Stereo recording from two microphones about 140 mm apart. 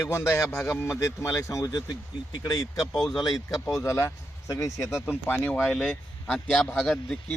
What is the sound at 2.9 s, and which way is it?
Speech, centre (ahead or behind).